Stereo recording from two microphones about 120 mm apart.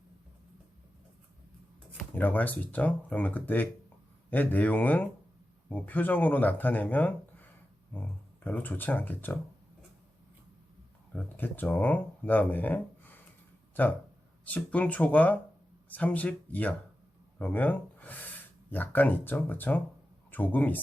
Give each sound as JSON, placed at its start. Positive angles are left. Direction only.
{"t": 2.1, "sound": "speech", "side_deg": 15}
{"t": 8.4, "sound": "speech", "side_deg": 15}
{"t": 11.1, "sound": "speech", "side_deg": 15}
{"t": 14.4, "sound": "speech", "side_deg": 10}